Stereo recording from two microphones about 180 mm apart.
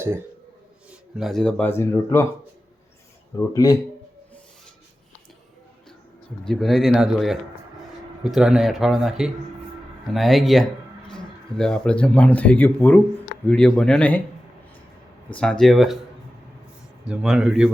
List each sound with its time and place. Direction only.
0.9 s speech: centre (ahead or behind); by 2.2 s 15° left (ahead or behind)
3.3 s speech: 20° left (ahead or behind)
6.4 s speech: centre (ahead or behind)
15.4 s speech: 5° left (ahead or behind)
17.1 s speech: 5° right (ahead or behind)